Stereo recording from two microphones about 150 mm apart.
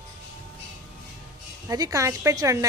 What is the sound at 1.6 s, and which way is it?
A woman's voice, 25° right (ahead or behind).